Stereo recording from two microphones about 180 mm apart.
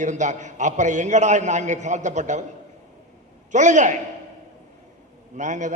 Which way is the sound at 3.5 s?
40° right (ahead or behind).